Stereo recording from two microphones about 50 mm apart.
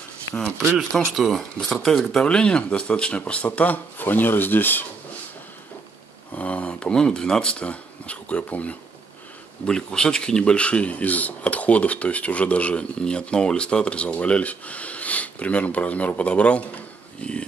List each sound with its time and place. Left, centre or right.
0.7 s speech: centre; by 4.8 s left
6.3 s speech: left
9.7 s speech: centre